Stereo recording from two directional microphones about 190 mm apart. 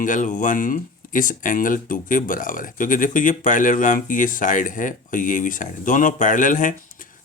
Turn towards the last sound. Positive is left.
turn(degrees=45)  # may be behind; listen again after turning